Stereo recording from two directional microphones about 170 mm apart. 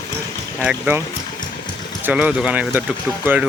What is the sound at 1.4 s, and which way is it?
Engine, 25° left (ahead or behind).